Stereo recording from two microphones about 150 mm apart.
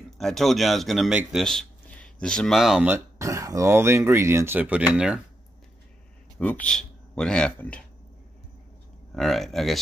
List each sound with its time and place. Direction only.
0.2 s speech: centre (ahead or behind)
2.9 s speech: 20° right (ahead or behind)
6.3 s speech: 10° left (ahead or behind)
9.1 s speech: centre (ahead or behind)